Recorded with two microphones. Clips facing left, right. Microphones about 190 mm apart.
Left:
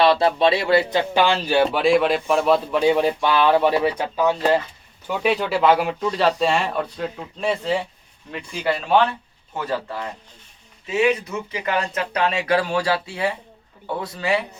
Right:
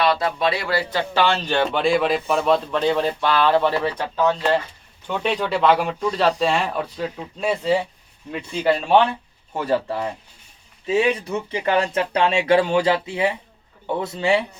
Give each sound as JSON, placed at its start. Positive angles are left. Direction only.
{"t": 0.0, "sound": "speech", "side_deg": 30}
{"t": 2.7, "sound": "speech", "side_deg": 10}
{"t": 9.6, "sound": "speech", "side_deg": -30}